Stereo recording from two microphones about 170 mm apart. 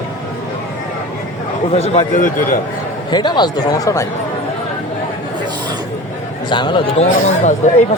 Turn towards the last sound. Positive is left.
turn(degrees=45)  # may be behind; listen again after turning